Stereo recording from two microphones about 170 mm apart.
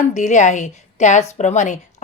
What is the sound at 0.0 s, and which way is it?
A woman's voice, 45° left (ahead or behind).